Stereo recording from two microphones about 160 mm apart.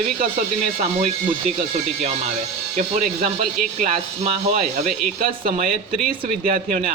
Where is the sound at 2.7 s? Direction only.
50° right (ahead or behind).